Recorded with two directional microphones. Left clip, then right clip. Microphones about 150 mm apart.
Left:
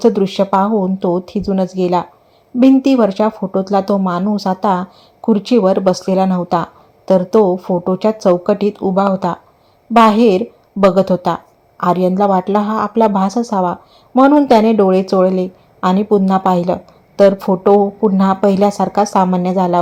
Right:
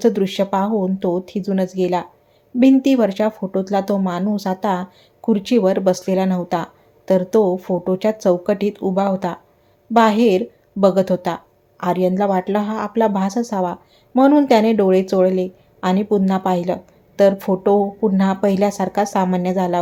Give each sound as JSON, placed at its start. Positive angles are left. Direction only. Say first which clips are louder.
{"t": 0.0, "sound": "speech", "louder": "left 4 dB", "side_deg": 20}